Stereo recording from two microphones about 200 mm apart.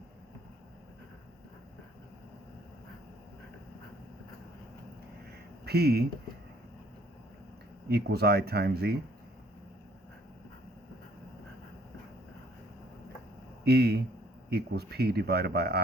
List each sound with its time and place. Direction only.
5.6 s speech: 55° right (ahead or behind)
7.9 s speech: 55° right (ahead or behind)
13.7 s speech: 55° right (ahead or behind)